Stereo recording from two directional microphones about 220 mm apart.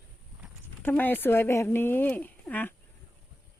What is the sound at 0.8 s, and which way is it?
Speech, 10° left (ahead or behind).